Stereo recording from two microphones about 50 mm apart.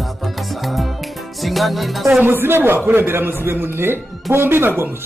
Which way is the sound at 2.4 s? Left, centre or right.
Right.